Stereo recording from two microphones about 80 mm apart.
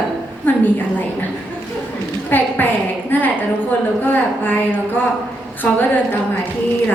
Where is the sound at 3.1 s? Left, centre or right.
Left.